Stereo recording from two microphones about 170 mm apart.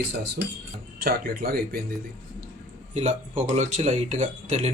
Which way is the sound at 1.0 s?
65° right (ahead or behind).